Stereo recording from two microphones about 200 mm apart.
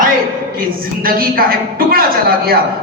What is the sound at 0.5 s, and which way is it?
Speech, 45° right (ahead or behind).